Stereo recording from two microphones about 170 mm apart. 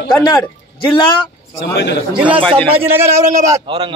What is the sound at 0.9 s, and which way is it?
Speech, 30° left (ahead or behind).